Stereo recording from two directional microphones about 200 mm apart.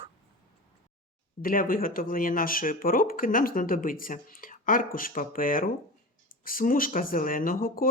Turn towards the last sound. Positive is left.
turn(degrees=45)  # may be behind; listen again after turning